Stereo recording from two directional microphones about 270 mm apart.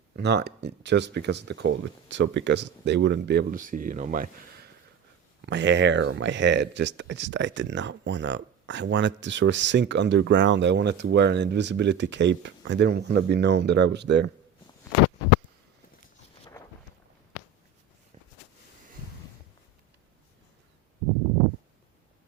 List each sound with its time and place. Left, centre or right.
0.2 s speech: right